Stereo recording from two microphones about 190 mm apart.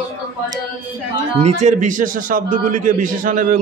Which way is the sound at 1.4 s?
40° right (ahead or behind).